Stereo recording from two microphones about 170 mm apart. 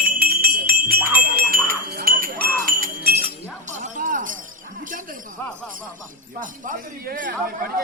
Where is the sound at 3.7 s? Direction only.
45° right (ahead or behind).